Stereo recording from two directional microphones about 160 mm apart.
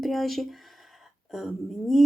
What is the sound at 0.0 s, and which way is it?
Speech, centre (ahead or behind).